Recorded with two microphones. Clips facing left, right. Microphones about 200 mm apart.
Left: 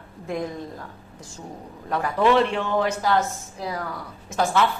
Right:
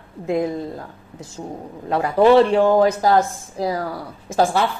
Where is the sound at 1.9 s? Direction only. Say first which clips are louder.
Right 6 dB; 30° right (ahead or behind).